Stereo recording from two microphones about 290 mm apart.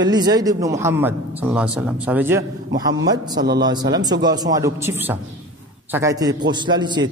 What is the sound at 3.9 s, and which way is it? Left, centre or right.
Speech, centre.